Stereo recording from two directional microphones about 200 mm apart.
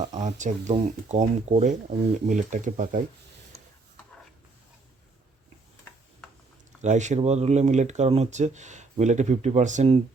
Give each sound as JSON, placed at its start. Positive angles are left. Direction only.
{"t": 0.1, "sound": "speech", "side_deg": -35}
{"t": 6.8, "sound": "speech", "side_deg": -35}